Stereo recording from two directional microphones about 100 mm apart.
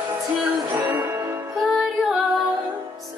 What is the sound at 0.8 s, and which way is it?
Music, 20° right (ahead or behind).